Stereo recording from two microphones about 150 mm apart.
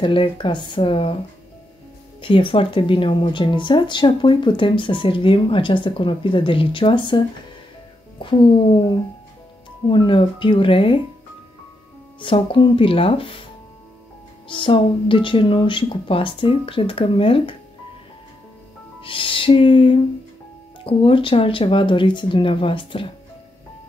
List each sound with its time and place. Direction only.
0.0 s speech: 35° left (ahead or behind)
2.2 s speech: 35° left (ahead or behind)
8.2 s speech: 35° left (ahead or behind)
12.2 s speech: 35° left (ahead or behind)
14.5 s speech: 35° left (ahead or behind)
18.9 s speech: 35° left (ahead or behind)